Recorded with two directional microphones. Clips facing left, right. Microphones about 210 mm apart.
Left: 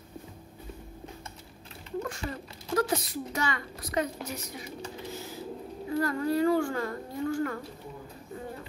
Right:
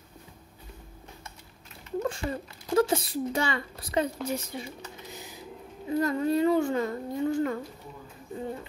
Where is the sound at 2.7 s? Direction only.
25° right (ahead or behind).